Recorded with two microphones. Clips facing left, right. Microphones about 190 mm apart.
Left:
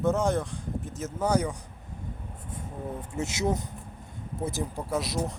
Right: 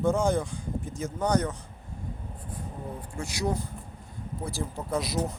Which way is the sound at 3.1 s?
20° left (ahead or behind).